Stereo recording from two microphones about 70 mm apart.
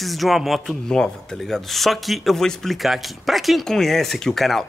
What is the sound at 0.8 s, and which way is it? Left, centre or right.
A man's voice, centre.